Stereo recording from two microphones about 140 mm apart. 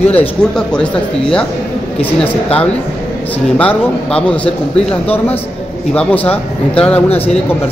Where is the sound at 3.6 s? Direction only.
10° left (ahead or behind).